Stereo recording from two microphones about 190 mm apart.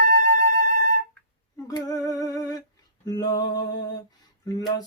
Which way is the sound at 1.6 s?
20° left (ahead or behind).